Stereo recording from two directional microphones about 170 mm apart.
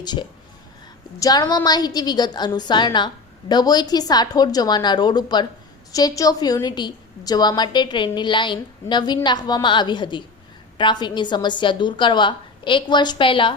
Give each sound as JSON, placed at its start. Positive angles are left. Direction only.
{"t": 0.0, "sound": "a woman's voice", "side_deg": 25}